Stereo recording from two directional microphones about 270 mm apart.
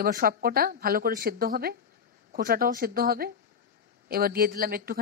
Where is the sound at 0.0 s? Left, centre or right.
Right.